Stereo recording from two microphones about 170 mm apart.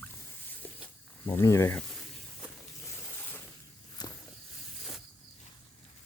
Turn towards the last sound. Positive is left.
turn(degrees=25)  # may be behind; listen again after turning